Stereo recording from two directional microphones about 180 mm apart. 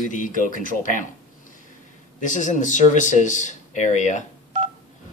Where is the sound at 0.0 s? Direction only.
45° left (ahead or behind).